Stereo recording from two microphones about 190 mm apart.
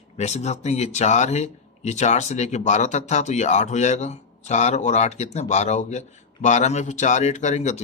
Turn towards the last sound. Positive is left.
turn(degrees=35)  # may be behind; listen again after turning